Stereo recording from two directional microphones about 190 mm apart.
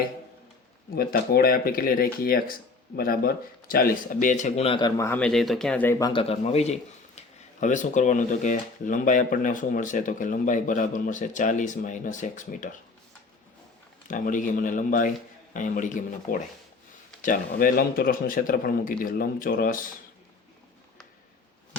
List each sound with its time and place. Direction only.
0.9 s speech: 50° left (ahead or behind); by 6.2 s 20° left (ahead or behind)
6.2 s a man's voice: 35° left (ahead or behind)
14.1 s speech: 45° left (ahead or behind)